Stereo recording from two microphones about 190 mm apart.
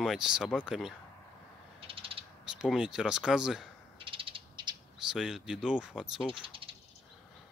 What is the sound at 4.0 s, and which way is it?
Frog, 25° right (ahead or behind).